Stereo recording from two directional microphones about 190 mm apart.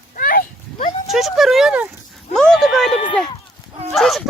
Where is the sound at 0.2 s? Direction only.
50° left (ahead or behind).